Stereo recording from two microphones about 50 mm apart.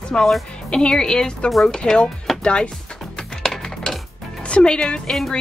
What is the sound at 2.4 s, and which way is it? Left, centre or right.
Speech, centre.